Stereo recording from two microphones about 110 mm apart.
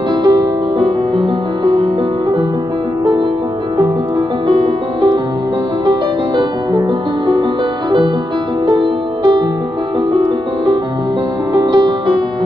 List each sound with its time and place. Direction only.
0.1 s music: 40° right (ahead or behind)
1.1 s music: 30° right (ahead or behind)
4.5 s music: 40° right (ahead or behind)
8.6 s music: 45° right (ahead or behind)
11.5 s music: 45° right (ahead or behind)